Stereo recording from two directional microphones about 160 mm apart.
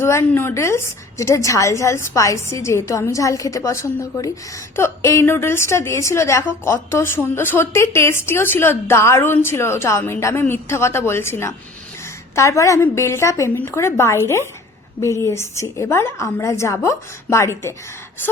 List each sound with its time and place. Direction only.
0.0 s a woman's voice: 15° left (ahead or behind)